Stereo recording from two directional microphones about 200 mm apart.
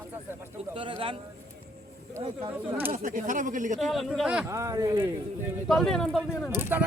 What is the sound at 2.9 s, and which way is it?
Speech, 40° right (ahead or behind).